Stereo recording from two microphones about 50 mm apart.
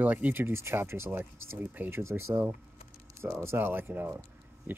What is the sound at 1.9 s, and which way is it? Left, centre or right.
Speech, right.